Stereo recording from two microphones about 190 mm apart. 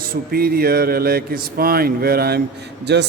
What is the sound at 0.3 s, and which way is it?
Speech, 55° right (ahead or behind).